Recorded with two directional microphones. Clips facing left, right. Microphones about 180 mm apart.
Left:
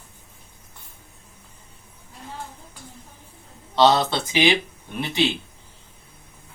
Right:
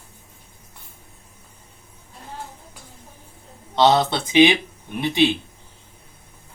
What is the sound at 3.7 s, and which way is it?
Speech, 20° right (ahead or behind).